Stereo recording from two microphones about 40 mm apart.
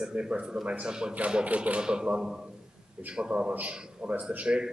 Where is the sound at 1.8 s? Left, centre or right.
Right.